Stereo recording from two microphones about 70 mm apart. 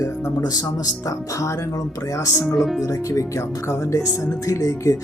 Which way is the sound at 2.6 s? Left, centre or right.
Centre.